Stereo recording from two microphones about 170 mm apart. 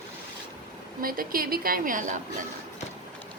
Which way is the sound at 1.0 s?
60° right (ahead or behind).